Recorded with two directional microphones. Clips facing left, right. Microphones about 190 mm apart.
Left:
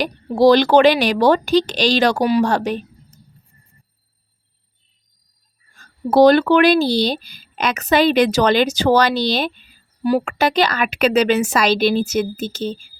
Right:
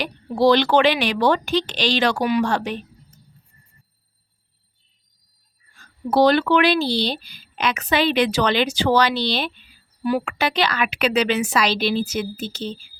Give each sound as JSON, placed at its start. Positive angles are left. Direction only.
{"t": 0.0, "sound": "speech", "side_deg": 40}
{"t": 5.7, "sound": "speech", "side_deg": 45}